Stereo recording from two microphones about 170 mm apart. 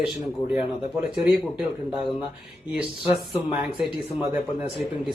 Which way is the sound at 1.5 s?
Centre (ahead or behind).